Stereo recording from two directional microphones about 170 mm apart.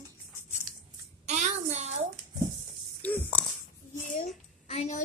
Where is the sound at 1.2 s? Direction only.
45° right (ahead or behind).